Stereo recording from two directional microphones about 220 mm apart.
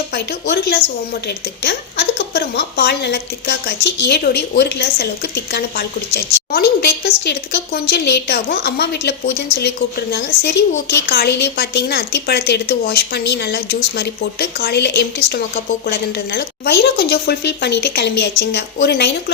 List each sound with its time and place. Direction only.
0.1 s speech: 45° left (ahead or behind)